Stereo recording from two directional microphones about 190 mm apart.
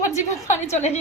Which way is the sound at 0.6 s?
35° left (ahead or behind).